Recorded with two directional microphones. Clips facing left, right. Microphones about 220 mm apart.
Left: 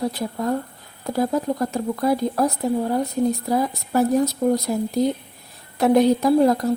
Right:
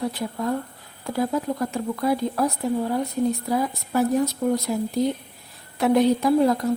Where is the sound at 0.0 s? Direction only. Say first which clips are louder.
Left 2 dB; 40° left (ahead or behind).